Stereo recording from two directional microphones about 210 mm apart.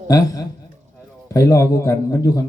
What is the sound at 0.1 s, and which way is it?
A man's voice, 15° left (ahead or behind).